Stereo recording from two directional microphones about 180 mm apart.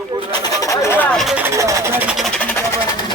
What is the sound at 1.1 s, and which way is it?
Vehicle, centre (ahead or behind).